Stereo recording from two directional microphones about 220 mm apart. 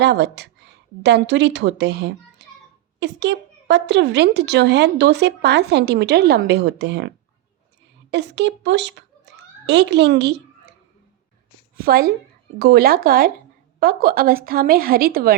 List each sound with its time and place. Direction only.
0.0 s a woman's voice: 50° right (ahead or behind)
2.4 s a sound: 50° right (ahead or behind)
3.0 s a woman's voice: 50° right (ahead or behind)
8.1 s speech: 55° right (ahead or behind)
11.8 s a woman's voice: 45° right (ahead or behind)